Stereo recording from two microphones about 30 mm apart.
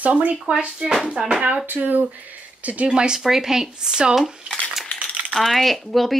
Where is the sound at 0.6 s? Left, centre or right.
Right.